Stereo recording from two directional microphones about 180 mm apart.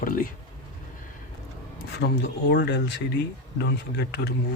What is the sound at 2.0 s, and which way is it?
Speech, 80° left.